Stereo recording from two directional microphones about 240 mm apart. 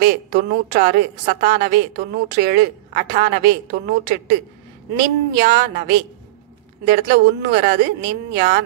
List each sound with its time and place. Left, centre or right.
0.0 s a woman's voice: right